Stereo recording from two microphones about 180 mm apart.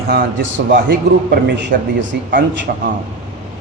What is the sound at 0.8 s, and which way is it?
A man's voice, 75° right (ahead or behind).